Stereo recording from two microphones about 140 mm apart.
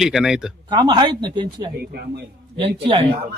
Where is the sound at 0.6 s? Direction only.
30° right (ahead or behind).